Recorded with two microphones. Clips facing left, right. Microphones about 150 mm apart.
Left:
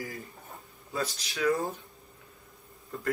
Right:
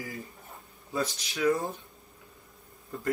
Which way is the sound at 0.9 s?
20° right (ahead or behind).